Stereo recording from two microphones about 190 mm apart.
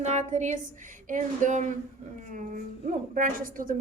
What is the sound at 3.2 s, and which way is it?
Speech, 45° right (ahead or behind).